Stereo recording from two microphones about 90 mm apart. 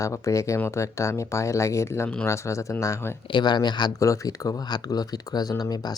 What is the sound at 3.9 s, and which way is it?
Speech, 35° left (ahead or behind).